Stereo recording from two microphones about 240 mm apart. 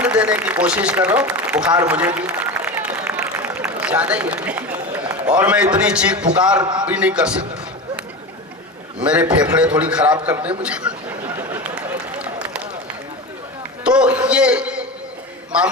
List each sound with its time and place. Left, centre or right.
0.0 s a man's voice: centre
2.2 s a sound: centre
4.4 s a man's voice: centre
6.6 s a man's voice: centre
6.8 s a man's voice: centre
9.0 s a man's voice: centre
11.3 s a sound: centre
13.8 s a man's voice: centre